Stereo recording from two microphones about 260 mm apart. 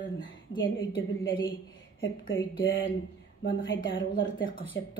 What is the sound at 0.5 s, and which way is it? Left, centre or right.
Speech, left.